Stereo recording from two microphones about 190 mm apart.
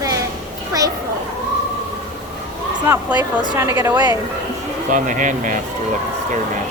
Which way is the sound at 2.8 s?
10° right (ahead or behind).